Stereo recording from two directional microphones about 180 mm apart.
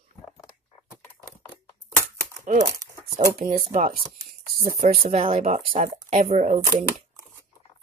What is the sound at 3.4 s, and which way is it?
Speech, 50° right (ahead or behind).